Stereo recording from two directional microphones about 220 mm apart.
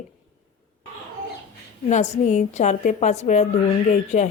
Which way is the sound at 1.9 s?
30° left (ahead or behind).